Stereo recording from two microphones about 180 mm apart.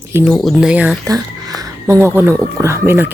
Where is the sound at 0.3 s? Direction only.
Centre (ahead or behind).